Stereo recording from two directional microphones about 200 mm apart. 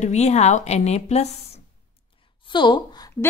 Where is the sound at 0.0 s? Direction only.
35° left (ahead or behind).